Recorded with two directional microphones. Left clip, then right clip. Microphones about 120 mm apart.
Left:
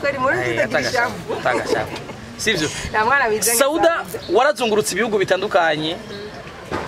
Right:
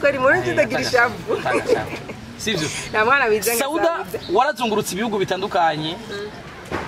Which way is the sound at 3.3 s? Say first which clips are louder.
Left 3 dB; 40° left (ahead or behind).